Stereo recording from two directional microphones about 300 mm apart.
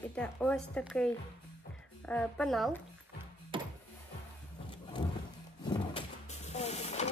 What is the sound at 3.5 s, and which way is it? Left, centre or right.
Music, centre.